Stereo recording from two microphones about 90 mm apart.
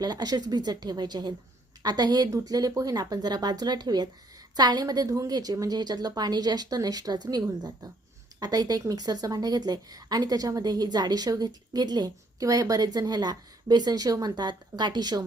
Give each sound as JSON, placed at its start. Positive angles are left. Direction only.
{"t": 0.0, "sound": "a woman's voice", "side_deg": -50}